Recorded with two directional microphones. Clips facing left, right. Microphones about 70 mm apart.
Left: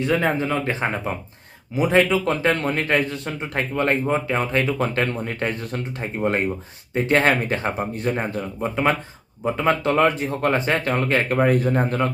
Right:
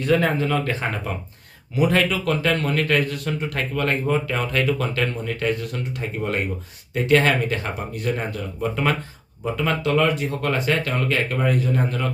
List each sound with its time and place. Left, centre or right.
0.0 s a man's voice: centre; by 12.0 s left